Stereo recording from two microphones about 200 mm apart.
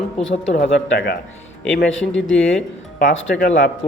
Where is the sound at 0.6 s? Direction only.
50° left (ahead or behind).